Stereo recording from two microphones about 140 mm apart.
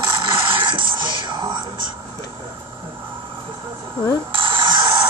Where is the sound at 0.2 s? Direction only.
35° right (ahead or behind).